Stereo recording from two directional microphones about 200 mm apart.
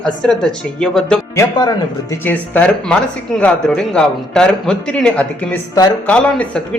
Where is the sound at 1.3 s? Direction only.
15° left (ahead or behind).